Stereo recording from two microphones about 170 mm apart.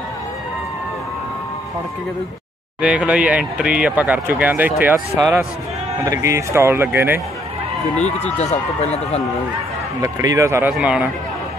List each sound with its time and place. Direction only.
2.8 s speech: 5° right (ahead or behind)
8.4 s speech: 40° left (ahead or behind)
10.0 s speech: 20° right (ahead or behind)